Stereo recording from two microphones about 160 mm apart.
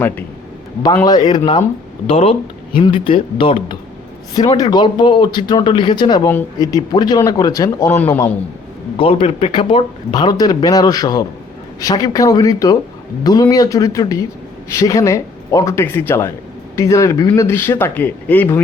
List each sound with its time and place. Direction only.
1.0 s speech: 25° left (ahead or behind)
9.0 s speech: 35° left (ahead or behind); by 18.4 s 10° left (ahead or behind)